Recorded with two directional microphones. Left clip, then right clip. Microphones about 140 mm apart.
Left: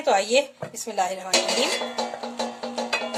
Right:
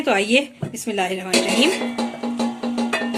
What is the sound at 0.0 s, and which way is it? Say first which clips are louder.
Speech: right 2 dB; 45° left (ahead or behind).